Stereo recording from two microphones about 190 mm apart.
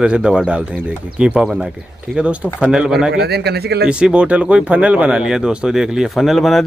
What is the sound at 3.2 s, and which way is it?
Speech, 60° right (ahead or behind).